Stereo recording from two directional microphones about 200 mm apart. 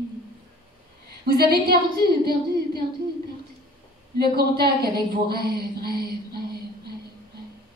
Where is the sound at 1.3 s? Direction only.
50° right (ahead or behind).